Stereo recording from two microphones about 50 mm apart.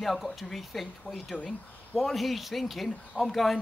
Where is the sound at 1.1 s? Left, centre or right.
Centre.